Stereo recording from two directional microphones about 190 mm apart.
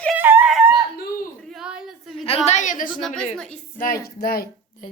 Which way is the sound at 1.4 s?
Centre (ahead or behind).